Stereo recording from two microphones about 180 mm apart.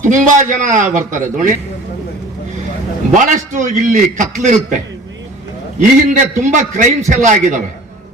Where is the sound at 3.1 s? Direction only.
45° right (ahead or behind).